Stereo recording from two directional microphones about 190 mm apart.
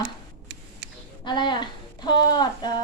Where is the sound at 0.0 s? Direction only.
65° right (ahead or behind).